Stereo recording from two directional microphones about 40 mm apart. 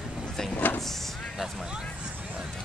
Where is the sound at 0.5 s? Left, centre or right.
Left.